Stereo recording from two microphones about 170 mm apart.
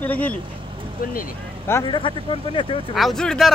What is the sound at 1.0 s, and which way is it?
Speech, 55° left (ahead or behind).